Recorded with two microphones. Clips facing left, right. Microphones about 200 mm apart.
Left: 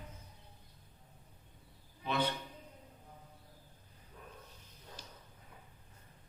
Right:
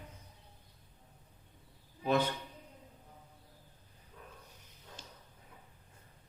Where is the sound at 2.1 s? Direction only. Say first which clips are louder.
Right 4 dB; 45° right (ahead or behind).